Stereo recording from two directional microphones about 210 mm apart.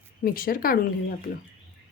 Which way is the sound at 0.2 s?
40° left (ahead or behind).